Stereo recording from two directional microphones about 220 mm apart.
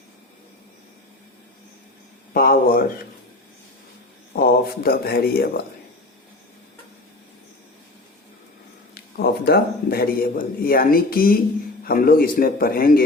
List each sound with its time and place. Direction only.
2.3 s a man's voice: 40° left (ahead or behind)
4.4 s speech: 45° left (ahead or behind)
9.0 s a man's voice: 45° left (ahead or behind)